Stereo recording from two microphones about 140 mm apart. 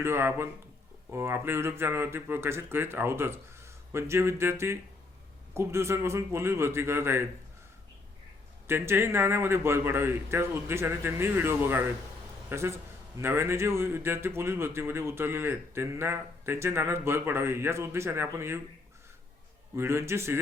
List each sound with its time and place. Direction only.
0.0 s speech: 15° right (ahead or behind)
8.6 s a man's voice: 15° right (ahead or behind)
19.7 s a man's voice: 20° right (ahead or behind)